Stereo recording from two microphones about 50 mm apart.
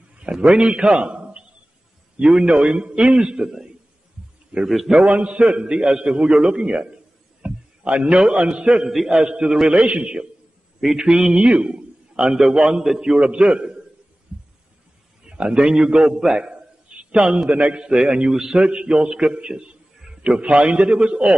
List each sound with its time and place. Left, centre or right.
0.2 s a man's voice: centre
4.8 s a man's voice: right
11.0 s a man's voice: centre
12.2 s a man's voice: centre
13.2 s a man's voice: right
15.2 s a man's voice: right
18.6 s a man's voice: right
20.0 s a sound: centre
20.3 s a man's voice: right